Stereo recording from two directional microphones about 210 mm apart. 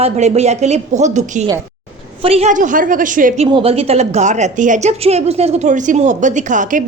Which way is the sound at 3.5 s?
25° right (ahead or behind).